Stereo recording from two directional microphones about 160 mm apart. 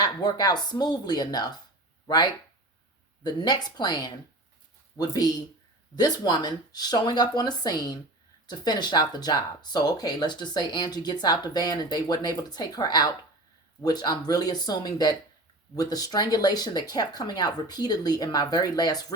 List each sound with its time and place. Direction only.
0.0 s speech: 25° left (ahead or behind)